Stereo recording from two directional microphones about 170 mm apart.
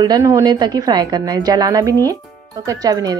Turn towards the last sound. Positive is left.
turn(degrees=-20)  # may be behind; listen again after turning